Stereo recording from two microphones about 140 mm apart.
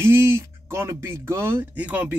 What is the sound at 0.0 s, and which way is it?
A man's voice, 15° right (ahead or behind).